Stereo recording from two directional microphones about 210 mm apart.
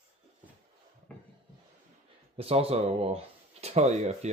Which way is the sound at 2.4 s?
30° right (ahead or behind).